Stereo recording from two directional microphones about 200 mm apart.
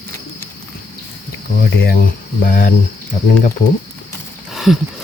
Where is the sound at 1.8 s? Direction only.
50° left (ahead or behind).